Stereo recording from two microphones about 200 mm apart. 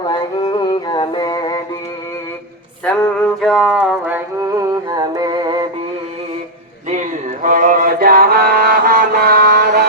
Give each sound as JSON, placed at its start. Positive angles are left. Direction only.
{"t": 0.1, "sound": "music", "side_deg": 20}
{"t": 2.8, "sound": "a sound", "side_deg": 5}
{"t": 4.4, "sound": "music", "side_deg": -15}
{"t": 6.8, "sound": "mantra", "side_deg": -40}